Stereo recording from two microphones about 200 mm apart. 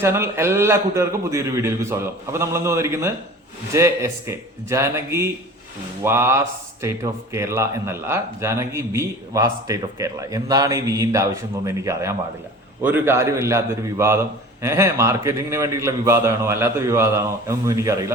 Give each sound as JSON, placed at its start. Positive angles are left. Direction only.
{"t": 0.0, "sound": "a man's voice", "side_deg": -15}